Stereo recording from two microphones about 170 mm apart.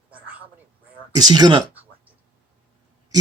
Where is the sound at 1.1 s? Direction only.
25° right (ahead or behind).